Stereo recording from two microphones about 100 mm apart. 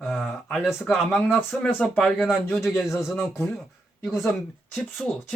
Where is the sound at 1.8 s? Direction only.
5° left (ahead or behind).